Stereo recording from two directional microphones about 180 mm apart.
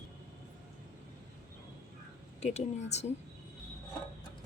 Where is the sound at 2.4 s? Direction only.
40° left (ahead or behind).